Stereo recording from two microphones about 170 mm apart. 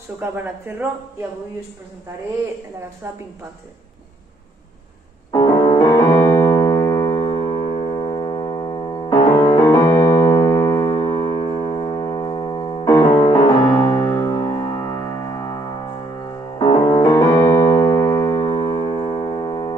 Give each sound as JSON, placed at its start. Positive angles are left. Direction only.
{"t": 0.2, "sound": "speech", "side_deg": -10}
{"t": 5.3, "sound": "piano", "side_deg": 20}
{"t": 12.8, "sound": "music", "side_deg": 20}
{"t": 16.5, "sound": "piano", "side_deg": 25}
{"t": 18.3, "sound": "music", "side_deg": 30}